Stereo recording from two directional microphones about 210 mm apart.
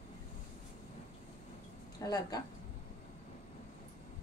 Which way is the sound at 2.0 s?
20° left (ahead or behind).